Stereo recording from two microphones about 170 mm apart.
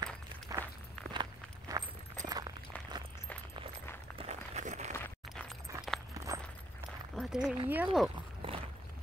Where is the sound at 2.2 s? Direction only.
25° right (ahead or behind).